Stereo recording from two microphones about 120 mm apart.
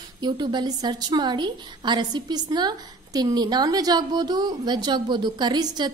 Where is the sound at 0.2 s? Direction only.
40° right (ahead or behind).